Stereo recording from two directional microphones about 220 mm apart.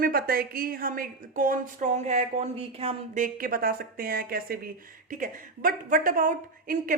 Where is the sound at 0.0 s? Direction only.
40° right (ahead or behind).